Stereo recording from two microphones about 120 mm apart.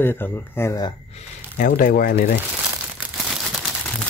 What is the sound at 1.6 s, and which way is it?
Speech, 90° left.